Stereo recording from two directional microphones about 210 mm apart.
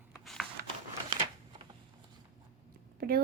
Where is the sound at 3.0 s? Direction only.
45° right (ahead or behind).